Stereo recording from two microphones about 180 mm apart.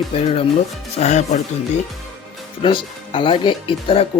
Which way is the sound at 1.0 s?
40° left (ahead or behind).